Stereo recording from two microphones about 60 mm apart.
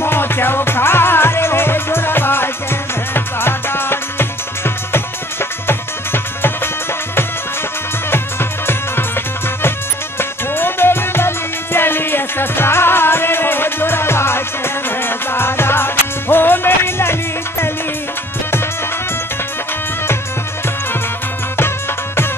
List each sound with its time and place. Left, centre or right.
0.0 s music: left
8.1 s music: left
21.5 s music: left